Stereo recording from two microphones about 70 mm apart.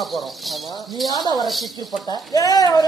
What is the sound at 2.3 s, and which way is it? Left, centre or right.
Speech, left.